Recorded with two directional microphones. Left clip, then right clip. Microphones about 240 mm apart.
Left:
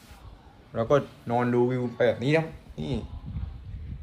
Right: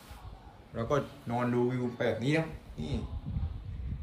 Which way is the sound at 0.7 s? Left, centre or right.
Centre.